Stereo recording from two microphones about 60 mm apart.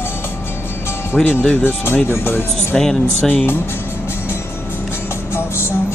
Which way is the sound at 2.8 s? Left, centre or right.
Centre.